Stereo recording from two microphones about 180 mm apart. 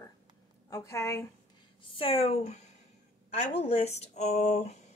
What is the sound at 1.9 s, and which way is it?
Speech, 30° left (ahead or behind).